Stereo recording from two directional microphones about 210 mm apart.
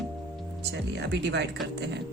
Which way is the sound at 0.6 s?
55° right (ahead or behind).